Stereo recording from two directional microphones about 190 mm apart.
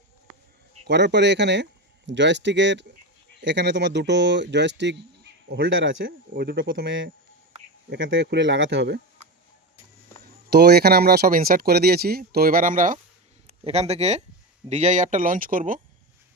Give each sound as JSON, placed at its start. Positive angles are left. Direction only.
{"t": 0.9, "sound": "speech", "side_deg": -65}
{"t": 6.1, "sound": "speech", "side_deg": -55}
{"t": 10.5, "sound": "speech", "side_deg": -60}
{"t": 13.5, "sound": "speech", "side_deg": -35}